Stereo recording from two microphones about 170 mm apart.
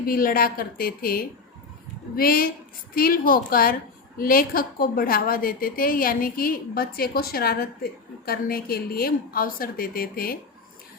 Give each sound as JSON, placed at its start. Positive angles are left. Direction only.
{"t": 0.0, "sound": "a woman's voice", "side_deg": 60}